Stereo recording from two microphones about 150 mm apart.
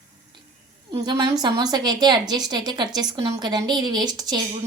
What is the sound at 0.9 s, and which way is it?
A woman's voice, 25° right (ahead or behind).